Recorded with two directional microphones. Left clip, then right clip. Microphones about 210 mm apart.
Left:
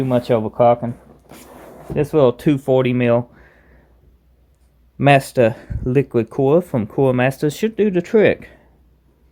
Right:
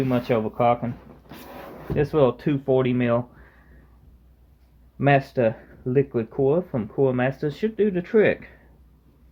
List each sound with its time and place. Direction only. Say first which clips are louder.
0.0 s speech: left 6 dB; 40° left (ahead or behind)
2.0 s speech: left 5 dB; 40° left (ahead or behind)
4.9 s speech: left 7 dB; 45° left (ahead or behind)